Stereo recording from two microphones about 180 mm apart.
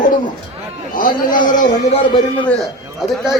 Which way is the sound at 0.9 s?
50° left (ahead or behind).